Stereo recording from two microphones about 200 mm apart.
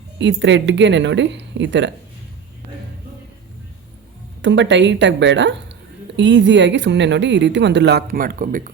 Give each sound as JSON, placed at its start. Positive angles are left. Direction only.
{"t": 0.2, "sound": "speech", "side_deg": -65}
{"t": 4.4, "sound": "speech", "side_deg": -65}